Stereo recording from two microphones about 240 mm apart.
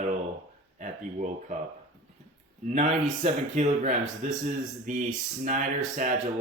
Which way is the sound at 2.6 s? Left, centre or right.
Right.